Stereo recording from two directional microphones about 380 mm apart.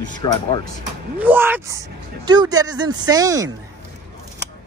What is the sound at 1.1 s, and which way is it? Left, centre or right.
Speech, centre.